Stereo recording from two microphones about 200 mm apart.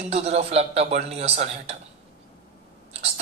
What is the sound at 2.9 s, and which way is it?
Whispering, 30° right (ahead or behind).